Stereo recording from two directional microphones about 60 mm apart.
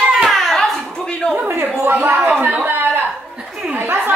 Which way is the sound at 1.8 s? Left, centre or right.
Right.